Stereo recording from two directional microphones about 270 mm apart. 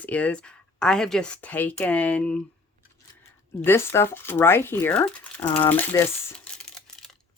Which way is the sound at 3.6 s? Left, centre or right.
Centre.